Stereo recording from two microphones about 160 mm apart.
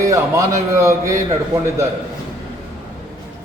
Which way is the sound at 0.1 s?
20° right (ahead or behind).